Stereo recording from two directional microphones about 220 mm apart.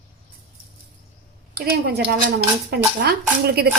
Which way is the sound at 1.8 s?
45° right (ahead or behind).